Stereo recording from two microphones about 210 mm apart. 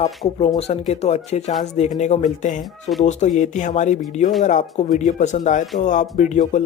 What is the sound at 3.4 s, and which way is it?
Speech, 35° left (ahead or behind).